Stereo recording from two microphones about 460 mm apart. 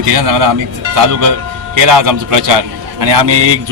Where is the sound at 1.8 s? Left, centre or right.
Right.